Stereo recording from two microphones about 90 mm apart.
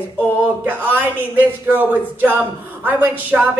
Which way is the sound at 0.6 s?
20° right (ahead or behind).